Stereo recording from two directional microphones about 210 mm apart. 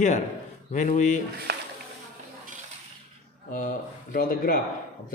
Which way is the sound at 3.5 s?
40° left (ahead or behind).